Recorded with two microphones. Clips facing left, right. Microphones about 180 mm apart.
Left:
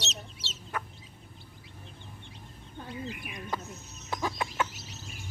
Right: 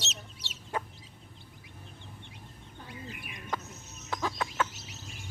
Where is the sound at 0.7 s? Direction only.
25° right (ahead or behind).